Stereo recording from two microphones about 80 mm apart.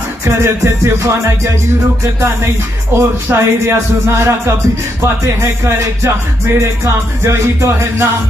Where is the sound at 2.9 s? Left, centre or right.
Right.